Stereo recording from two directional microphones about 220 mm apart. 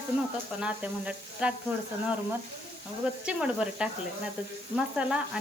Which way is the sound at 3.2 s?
5° right (ahead or behind).